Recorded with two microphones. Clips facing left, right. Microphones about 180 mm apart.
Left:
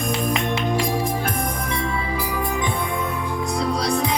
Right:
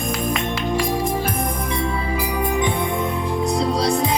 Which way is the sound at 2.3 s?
20° right (ahead or behind).